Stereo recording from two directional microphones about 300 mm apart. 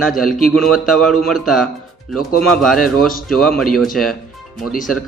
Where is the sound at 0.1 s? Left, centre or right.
Centre.